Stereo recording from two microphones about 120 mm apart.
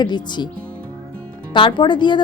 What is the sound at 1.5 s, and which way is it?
Speech, 40° left (ahead or behind).